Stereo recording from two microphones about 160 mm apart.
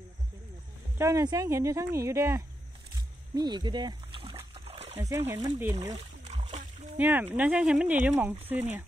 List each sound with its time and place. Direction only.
0.9 s speech: 20° right (ahead or behind)
4.6 s splash: 40° right (ahead or behind)
4.9 s speech: 15° right (ahead or behind)
5.9 s a sound: 40° right (ahead or behind)
7.0 s speech: 10° right (ahead or behind)